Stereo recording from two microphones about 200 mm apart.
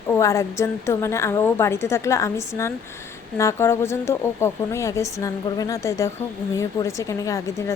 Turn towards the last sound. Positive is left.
turn(degrees=15)  # may be behind; listen again after turning